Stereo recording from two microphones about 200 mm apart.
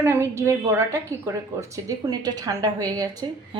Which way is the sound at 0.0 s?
15° right (ahead or behind).